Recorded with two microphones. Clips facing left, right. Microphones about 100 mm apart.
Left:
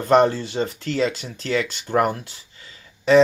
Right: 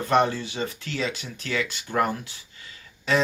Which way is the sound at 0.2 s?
35° left (ahead or behind).